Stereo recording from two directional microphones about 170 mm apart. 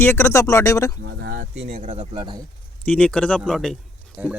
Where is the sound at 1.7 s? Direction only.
45° right (ahead or behind).